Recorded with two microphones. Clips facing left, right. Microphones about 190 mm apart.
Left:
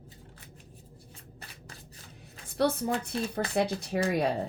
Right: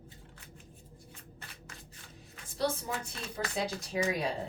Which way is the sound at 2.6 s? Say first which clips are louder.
Left 6 dB; 60° left (ahead or behind).